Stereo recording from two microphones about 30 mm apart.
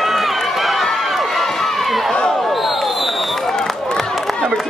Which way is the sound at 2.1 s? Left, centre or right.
Centre.